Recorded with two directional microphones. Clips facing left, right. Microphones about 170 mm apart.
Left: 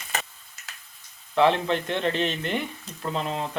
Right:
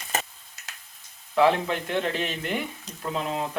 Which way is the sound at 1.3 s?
5° right (ahead or behind).